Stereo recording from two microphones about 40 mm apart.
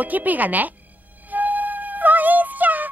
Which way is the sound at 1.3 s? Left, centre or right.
Right.